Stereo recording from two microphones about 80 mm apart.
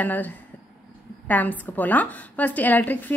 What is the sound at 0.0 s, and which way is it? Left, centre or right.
A woman's voice, left.